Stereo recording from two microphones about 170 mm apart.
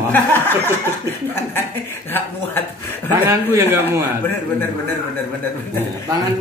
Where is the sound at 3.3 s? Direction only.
15° right (ahead or behind).